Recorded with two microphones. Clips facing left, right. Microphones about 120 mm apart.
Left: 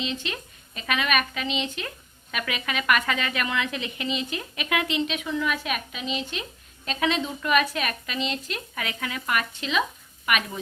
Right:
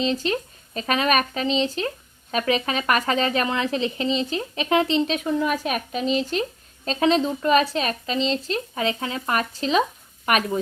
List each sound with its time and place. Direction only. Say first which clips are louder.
0.0 s speech: right 8 dB; 40° right (ahead or behind)